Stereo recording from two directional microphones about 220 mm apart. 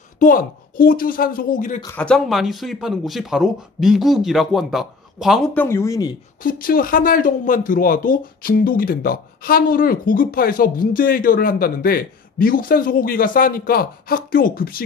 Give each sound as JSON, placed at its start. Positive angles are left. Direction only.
{"t": 0.2, "sound": "speech", "side_deg": 40}
{"t": 2.0, "sound": "speech", "side_deg": 5}
{"t": 6.4, "sound": "speech", "side_deg": 40}